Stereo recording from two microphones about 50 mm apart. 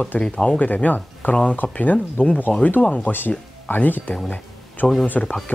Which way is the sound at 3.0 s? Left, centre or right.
Left.